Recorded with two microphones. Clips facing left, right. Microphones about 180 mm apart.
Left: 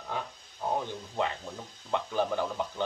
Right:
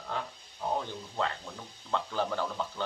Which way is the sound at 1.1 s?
15° left (ahead or behind).